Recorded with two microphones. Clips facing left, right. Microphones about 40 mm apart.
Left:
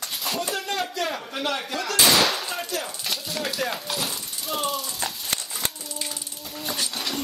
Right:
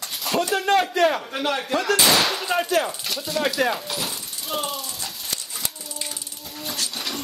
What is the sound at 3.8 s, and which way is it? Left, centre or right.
Speech, centre.